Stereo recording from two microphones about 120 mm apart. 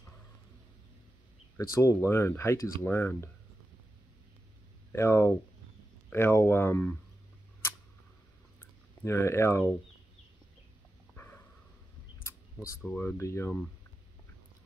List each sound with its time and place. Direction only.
1.6 s speech: 25° left (ahead or behind)
4.9 s speech: 20° left (ahead or behind)
8.5 s a sound: 20° left (ahead or behind)
11.1 s a sound: 15° left (ahead or behind)
12.5 s speech: 5° left (ahead or behind)
13.0 s speech: 20° left (ahead or behind)